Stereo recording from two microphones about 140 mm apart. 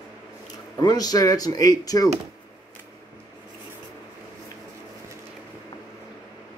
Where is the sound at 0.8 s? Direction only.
25° left (ahead or behind).